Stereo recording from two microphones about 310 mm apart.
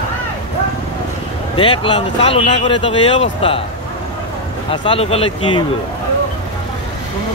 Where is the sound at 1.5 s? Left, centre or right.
Centre.